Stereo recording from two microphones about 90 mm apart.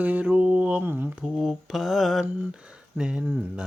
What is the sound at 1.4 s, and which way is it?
Mantra, 5° right (ahead or behind).